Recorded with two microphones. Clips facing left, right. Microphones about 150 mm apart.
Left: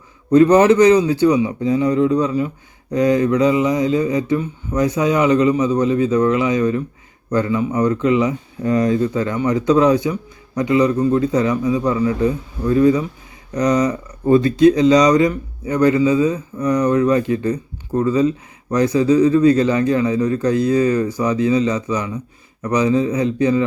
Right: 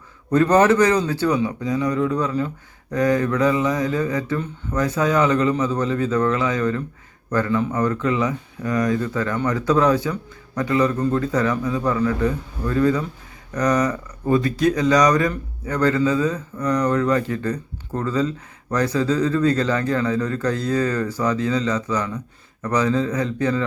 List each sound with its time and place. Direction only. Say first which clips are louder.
0.3 s speech: left 5 dB; 20° left (ahead or behind)
14.3 s speech: left 7 dB; 30° left (ahead or behind)